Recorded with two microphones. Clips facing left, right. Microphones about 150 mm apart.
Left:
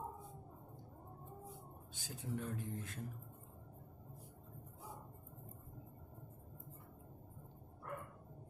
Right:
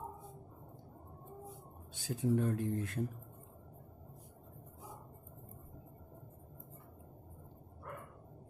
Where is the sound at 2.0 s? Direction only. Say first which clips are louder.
Right 11 dB; 70° right (ahead or behind).